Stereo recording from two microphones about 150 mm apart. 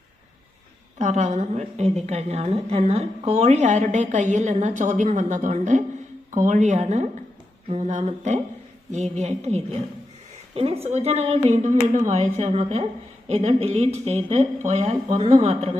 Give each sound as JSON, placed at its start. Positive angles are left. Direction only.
{"t": 0.9, "sound": "a woman's voice", "side_deg": -50}